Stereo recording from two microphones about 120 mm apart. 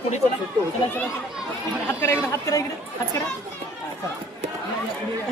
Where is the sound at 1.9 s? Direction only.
20° left (ahead or behind).